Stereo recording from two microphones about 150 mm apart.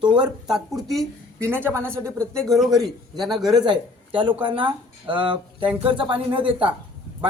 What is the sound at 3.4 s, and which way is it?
Speech, 30° right (ahead or behind).